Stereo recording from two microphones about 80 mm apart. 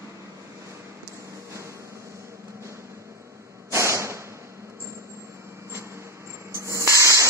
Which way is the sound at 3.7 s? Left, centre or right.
Right.